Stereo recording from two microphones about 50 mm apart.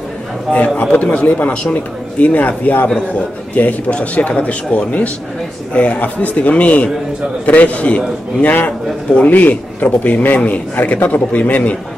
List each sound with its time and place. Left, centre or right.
0.5 s a man's voice: left